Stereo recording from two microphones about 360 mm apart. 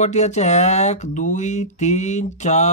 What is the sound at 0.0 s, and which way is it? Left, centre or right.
Speech, centre.